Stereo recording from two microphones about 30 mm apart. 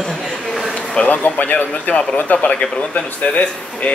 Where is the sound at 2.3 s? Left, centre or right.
Left.